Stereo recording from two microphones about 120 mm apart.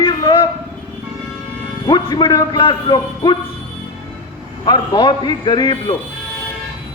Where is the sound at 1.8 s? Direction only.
40° left (ahead or behind).